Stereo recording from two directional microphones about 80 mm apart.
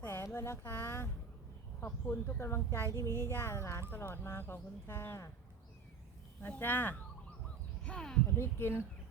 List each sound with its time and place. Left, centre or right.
0.0 s a sound: left
0.3 s speech: left
6.5 s speech: left
7.9 s speech: centre
8.4 s speech: left